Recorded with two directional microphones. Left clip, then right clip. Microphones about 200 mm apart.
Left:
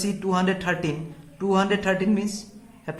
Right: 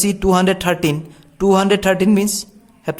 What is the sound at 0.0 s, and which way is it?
A man's voice, 60° right (ahead or behind).